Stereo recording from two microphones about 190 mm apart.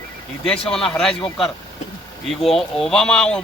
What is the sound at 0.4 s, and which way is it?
Speech, 5° left (ahead or behind).